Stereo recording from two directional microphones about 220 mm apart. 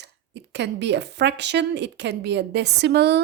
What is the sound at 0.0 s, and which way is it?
A woman's voice, 50° right (ahead or behind).